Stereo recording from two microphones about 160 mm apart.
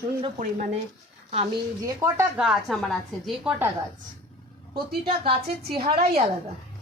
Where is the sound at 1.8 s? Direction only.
20° right (ahead or behind).